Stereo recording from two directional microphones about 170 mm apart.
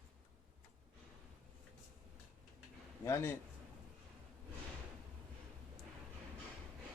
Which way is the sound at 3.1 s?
15° left (ahead or behind).